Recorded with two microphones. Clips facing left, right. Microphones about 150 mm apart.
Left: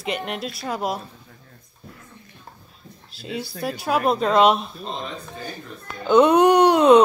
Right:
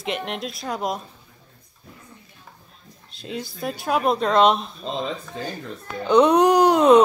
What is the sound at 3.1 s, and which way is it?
Speech, centre (ahead or behind).